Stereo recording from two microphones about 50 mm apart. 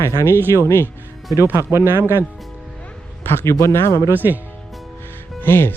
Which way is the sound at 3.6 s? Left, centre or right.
Left.